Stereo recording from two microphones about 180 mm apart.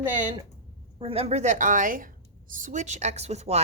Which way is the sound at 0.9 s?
30° right (ahead or behind).